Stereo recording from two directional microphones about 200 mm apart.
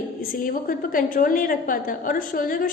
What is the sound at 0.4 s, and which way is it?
A woman's voice, 45° left (ahead or behind).